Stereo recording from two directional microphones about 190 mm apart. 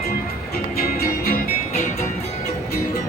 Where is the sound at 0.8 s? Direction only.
50° left (ahead or behind).